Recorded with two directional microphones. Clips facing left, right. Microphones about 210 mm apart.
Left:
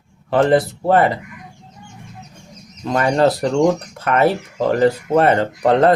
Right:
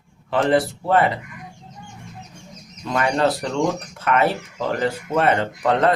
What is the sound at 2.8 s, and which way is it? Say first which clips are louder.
Speech: left 4 dB; 40° left (ahead or behind).